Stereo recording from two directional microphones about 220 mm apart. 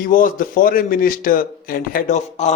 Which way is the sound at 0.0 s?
40° left (ahead or behind).